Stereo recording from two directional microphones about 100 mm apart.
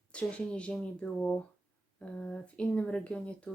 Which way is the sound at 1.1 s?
20° left (ahead or behind).